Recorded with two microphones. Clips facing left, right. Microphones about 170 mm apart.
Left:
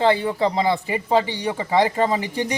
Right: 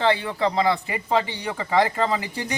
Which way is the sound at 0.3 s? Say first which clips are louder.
Left 2 dB; 20° left (ahead or behind).